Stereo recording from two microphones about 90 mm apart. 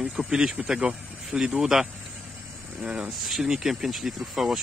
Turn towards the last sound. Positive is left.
turn(degrees=-5)  # may be behind; listen again after turning